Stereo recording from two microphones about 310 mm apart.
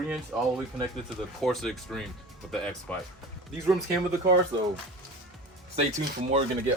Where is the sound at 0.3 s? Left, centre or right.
Centre.